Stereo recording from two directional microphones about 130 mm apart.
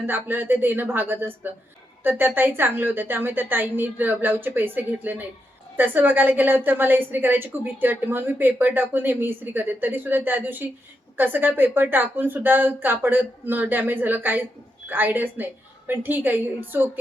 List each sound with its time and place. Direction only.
0.1 s a woman's voice: 15° right (ahead or behind)